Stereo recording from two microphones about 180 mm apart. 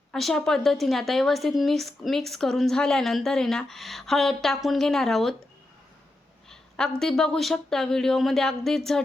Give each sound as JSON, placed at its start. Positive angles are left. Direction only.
{"t": 0.1, "sound": "a woman's voice", "side_deg": 0}
{"t": 6.5, "sound": "a woman's voice", "side_deg": 5}